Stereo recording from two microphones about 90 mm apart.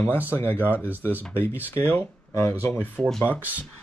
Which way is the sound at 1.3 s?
20° left (ahead or behind).